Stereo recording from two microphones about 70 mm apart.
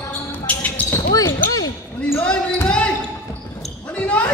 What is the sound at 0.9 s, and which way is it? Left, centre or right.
Basketball bounce, left.